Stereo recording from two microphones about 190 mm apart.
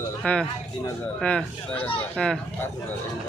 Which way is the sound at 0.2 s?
5° left (ahead or behind).